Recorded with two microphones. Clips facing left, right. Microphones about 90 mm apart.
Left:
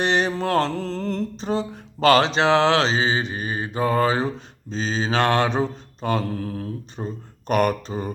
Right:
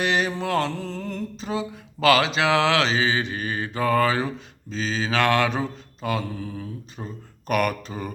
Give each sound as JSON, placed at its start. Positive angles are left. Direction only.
{"t": 0.0, "sound": "music", "side_deg": 35}
{"t": 4.4, "sound": "mantra", "side_deg": 30}
{"t": 6.2, "sound": "mantra", "side_deg": 50}
{"t": 6.9, "sound": "music", "side_deg": 30}